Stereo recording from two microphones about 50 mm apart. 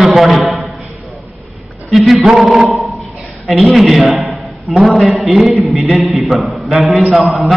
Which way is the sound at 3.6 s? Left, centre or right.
Centre.